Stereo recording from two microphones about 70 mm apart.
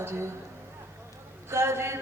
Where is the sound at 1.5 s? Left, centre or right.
Right.